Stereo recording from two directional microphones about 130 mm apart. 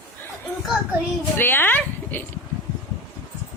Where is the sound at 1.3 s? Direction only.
15° left (ahead or behind).